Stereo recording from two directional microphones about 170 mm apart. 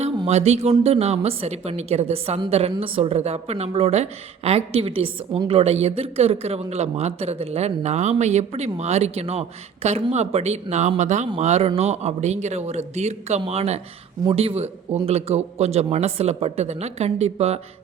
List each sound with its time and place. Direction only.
0.3 s speech: 40° right (ahead or behind)